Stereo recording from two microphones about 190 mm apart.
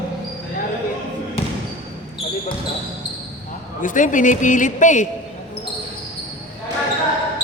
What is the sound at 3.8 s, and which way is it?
A man's voice, 45° left (ahead or behind).